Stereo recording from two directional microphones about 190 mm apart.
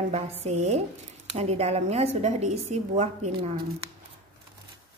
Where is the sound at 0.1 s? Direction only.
35° right (ahead or behind).